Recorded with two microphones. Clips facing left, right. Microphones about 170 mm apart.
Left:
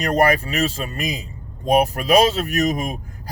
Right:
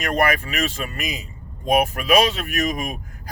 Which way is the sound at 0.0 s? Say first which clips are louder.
Left 3 dB; 35° left (ahead or behind).